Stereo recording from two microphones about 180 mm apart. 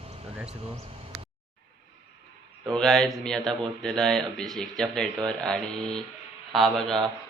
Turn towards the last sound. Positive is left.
turn(degrees=0)  # may be behind; listen again after turning